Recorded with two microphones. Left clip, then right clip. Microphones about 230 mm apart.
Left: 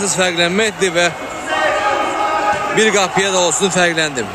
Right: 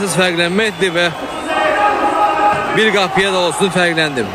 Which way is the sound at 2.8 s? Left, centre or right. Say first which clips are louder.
Right 1 dB; centre.